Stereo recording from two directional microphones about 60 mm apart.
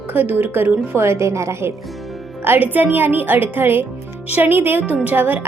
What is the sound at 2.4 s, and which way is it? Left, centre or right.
A woman's voice, right.